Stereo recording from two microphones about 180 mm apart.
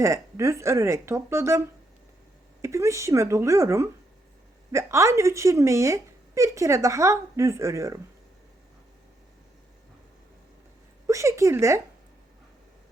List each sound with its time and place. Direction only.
0.0 s speech: 15° right (ahead or behind)
11.0 s speech: 15° right (ahead or behind)